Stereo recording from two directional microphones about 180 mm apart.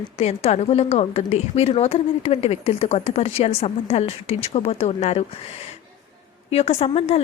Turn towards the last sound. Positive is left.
turn(degrees=35)  # may be behind; listen again after turning